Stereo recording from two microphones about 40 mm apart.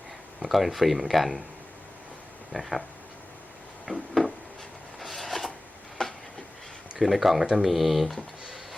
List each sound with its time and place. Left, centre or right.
0.4 s speech: centre
2.5 s speech: centre
3.9 s a sound: centre
4.9 s zipper: centre
6.0 s a sound: centre
7.0 s speech: centre